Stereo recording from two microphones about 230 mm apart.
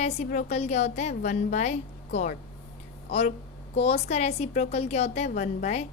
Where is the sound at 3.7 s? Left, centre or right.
Left.